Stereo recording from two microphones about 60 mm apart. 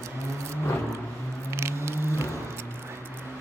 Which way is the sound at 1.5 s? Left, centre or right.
Right.